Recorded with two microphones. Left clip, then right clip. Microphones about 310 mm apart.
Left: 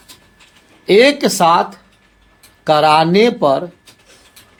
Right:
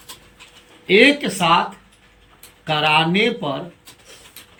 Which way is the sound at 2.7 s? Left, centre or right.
Centre.